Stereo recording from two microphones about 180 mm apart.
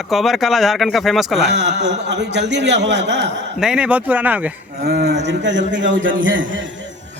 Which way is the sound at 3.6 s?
5° right (ahead or behind).